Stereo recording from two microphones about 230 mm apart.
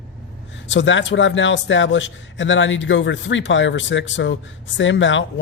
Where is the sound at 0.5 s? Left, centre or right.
Left.